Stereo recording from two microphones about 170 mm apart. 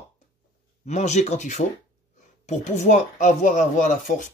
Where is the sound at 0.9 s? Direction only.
40° left (ahead or behind).